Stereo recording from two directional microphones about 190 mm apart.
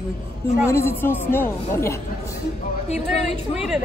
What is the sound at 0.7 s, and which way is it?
A woman's voice, 10° left (ahead or behind).